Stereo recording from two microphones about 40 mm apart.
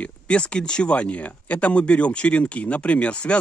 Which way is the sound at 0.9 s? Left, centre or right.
Left.